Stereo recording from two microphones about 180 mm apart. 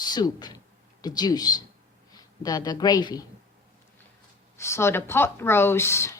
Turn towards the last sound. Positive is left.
turn(degrees=15)  # may be behind; listen again after turning